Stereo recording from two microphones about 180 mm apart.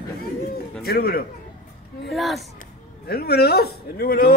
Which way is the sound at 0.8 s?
60° left (ahead or behind).